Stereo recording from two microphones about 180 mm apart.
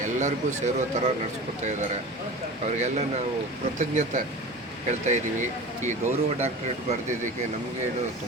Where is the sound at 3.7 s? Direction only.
40° right (ahead or behind).